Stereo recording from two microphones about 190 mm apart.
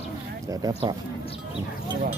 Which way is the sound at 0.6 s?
25° right (ahead or behind).